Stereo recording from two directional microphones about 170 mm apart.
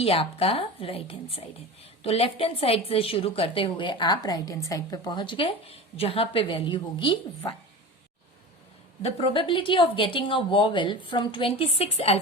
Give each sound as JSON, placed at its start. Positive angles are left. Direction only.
{"t": 0.0, "sound": "a woman's voice", "side_deg": 35}
{"t": 9.0, "sound": "a woman's voice", "side_deg": 35}